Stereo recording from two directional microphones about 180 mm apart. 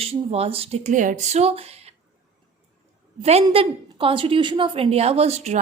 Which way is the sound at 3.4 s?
30° right (ahead or behind).